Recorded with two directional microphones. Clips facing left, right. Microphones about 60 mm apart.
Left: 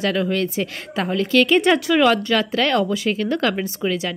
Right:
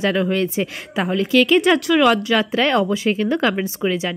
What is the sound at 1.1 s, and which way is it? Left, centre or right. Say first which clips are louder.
Speech: right 1 dB; centre.